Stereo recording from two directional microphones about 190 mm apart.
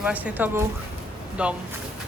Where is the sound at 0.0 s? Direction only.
5° right (ahead or behind).